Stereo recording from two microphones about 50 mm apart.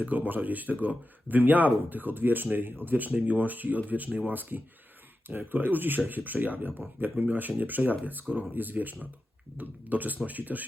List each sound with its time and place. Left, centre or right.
0.0 s speech: right